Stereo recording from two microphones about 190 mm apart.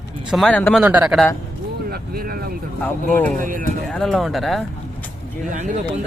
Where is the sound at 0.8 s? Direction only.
5° right (ahead or behind).